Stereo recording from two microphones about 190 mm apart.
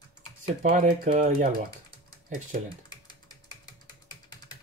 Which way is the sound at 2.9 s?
20° left (ahead or behind).